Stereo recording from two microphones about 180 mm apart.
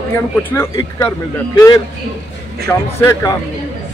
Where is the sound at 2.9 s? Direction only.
15° left (ahead or behind).